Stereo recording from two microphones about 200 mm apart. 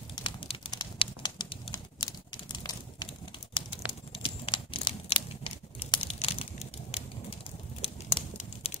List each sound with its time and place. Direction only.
0.1 s pigeon: 25° left (ahead or behind)
3.5 s crumpling: 25° left (ahead or behind)
8.6 s typing: 30° left (ahead or behind)